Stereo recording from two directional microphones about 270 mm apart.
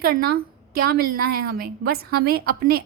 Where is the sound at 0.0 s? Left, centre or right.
Right.